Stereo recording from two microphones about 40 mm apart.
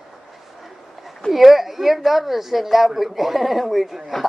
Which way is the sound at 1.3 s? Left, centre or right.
Centre.